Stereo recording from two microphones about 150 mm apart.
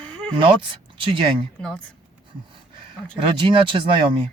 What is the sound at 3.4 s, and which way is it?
Speech, 35° right (ahead or behind).